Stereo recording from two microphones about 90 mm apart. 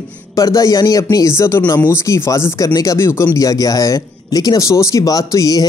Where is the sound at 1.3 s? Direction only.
30° left (ahead or behind).